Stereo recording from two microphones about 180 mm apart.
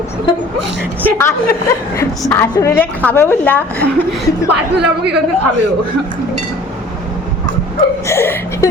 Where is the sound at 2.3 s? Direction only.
15° left (ahead or behind).